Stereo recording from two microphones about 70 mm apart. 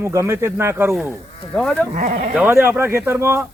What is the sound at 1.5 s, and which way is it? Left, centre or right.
Speech, centre.